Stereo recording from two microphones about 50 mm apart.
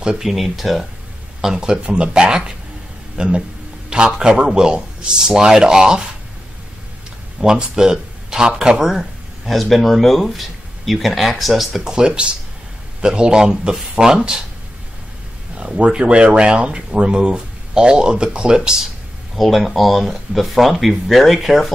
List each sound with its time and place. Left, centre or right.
0.0 s speech: centre
0.3 s speech: centre
1.4 s a man's voice: centre
7.3 s speech: centre
11.8 s a man's voice: centre
15.5 s speech: centre
19.3 s speech: centre